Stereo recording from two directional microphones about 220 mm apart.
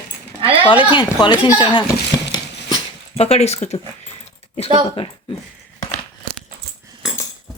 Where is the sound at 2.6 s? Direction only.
25° left (ahead or behind).